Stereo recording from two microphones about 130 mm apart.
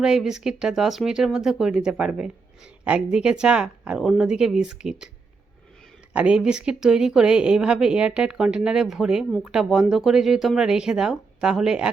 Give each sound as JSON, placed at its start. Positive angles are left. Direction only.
{"t": 0.0, "sound": "speech", "side_deg": -5}
{"t": 6.1, "sound": "speech", "side_deg": -10}